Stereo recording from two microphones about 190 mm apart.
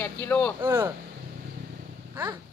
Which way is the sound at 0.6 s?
20° right (ahead or behind).